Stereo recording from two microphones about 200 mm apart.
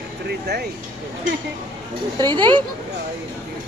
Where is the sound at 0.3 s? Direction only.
55° right (ahead or behind).